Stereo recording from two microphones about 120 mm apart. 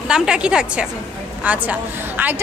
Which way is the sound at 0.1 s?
5° right (ahead or behind).